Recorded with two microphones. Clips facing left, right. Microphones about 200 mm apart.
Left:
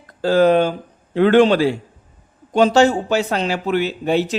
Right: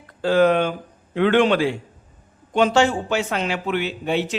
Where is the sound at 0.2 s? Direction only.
35° left (ahead or behind).